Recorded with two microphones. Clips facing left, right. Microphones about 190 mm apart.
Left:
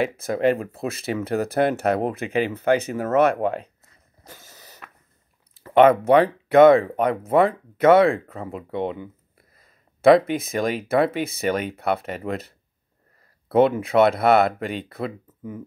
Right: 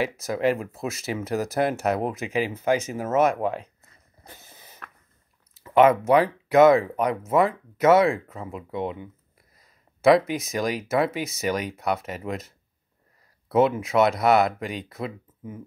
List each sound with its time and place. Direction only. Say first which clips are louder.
0.2 s speech: left 3 dB; 55° left (ahead or behind)
4.4 s a sound: left 2 dB; 80° left
5.7 s speech: left 3 dB; 30° left (ahead or behind)
6.5 s speech: left 3 dB; 60° left (ahead or behind)
7.8 s speech: left 3 dB; 60° left (ahead or behind)
8.4 s speech: left 3 dB; 35° left (ahead or behind)
9.6 s a sound: left 3 dB; 55° left (ahead or behind)
10.3 s speech: left 3 dB; 55° left (ahead or behind)
15.0 s speech: left 3 dB; 35° left (ahead or behind)